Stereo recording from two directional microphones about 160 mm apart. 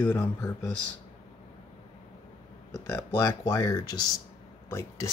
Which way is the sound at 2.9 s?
15° left (ahead or behind).